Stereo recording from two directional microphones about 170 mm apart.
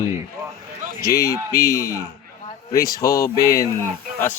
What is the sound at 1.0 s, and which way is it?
A man's voice, 20° left (ahead or behind).